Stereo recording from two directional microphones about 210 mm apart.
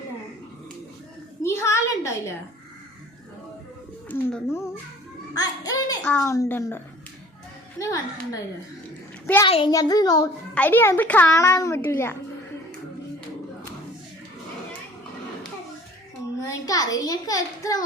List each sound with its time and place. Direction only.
1.4 s a sound: 15° left (ahead or behind)
4.1 s a child's voice: 10° left (ahead or behind)
9.5 s a child's voice: 20° left (ahead or behind)
10.5 s a child's voice: 10° left (ahead or behind)
16.5 s a child's voice: 15° left (ahead or behind)